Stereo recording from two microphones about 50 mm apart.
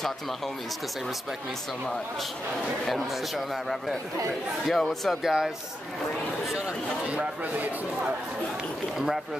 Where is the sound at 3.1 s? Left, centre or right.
Centre.